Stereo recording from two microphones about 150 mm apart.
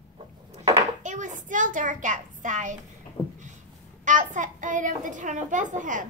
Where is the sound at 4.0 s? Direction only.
60° right (ahead or behind).